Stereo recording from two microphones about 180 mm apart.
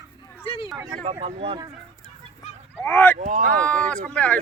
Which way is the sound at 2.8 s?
10° left (ahead or behind).